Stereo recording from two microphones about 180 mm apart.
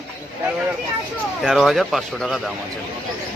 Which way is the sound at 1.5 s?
Centre (ahead or behind).